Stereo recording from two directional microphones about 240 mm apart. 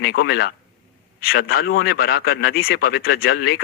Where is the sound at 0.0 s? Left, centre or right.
Left.